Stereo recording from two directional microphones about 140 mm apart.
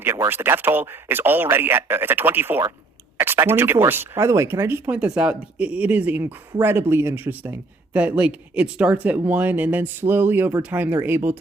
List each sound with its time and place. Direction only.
0.3 s speech: 15° right (ahead or behind)